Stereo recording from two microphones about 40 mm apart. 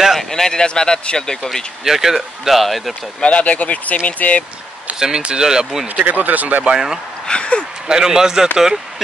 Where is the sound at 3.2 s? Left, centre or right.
Left.